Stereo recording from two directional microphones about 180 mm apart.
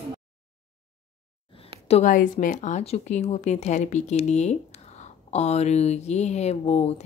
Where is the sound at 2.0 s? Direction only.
45° left (ahead or behind).